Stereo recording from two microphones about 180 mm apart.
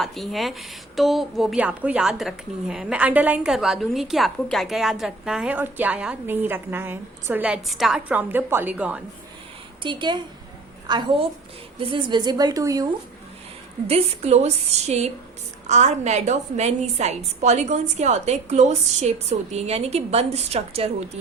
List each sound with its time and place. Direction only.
0.0 s a woman's voice: centre (ahead or behind)
9.8 s a woman's voice: 25° right (ahead or behind)
13.8 s a woman's voice: 35° right (ahead or behind)